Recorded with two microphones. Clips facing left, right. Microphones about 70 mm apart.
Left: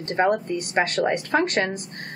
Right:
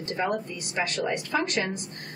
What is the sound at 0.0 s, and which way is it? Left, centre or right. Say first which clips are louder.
A woman's voice: left 7 dB; left.